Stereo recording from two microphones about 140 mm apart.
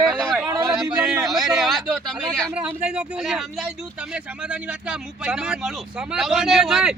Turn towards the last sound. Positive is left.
turn(degrees=-5)  # may be behind; listen again after turning